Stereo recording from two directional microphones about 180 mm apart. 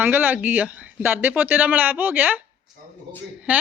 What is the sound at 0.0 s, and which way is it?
Speech, 10° right (ahead or behind).